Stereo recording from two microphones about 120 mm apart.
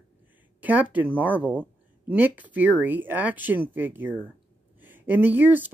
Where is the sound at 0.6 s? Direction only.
15° right (ahead or behind).